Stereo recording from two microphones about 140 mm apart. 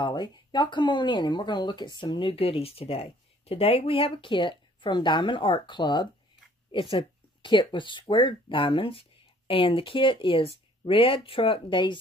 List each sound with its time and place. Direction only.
0.0 s speech: 30° left (ahead or behind)